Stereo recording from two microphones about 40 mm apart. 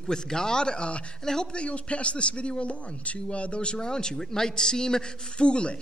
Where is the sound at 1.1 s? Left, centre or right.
Centre.